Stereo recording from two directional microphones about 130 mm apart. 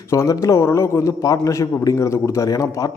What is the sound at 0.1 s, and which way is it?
A man's voice, 25° left (ahead or behind).